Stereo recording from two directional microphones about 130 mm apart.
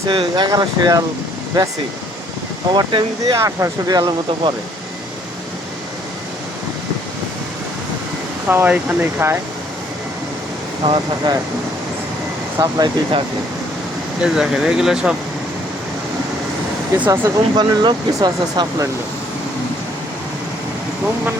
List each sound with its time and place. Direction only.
0.1 s speech: 40° right (ahead or behind)
0.5 s speech: 30° right (ahead or behind)
2.7 s speech: 35° right (ahead or behind)
3.3 s speech: 25° right (ahead or behind)
8.4 s speech: 15° right (ahead or behind)
10.8 s speech: 45° right (ahead or behind)
12.5 s speech: 30° right (ahead or behind)
14.2 s speech: 5° right (ahead or behind)
17.1 s speech: 30° right (ahead or behind)